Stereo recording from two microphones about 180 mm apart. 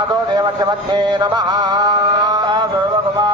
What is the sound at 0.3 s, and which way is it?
Mantra, 25° right (ahead or behind).